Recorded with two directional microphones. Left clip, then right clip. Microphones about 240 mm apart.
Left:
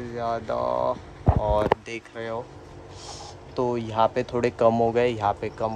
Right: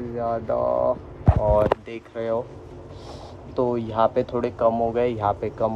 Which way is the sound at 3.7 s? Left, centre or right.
Centre.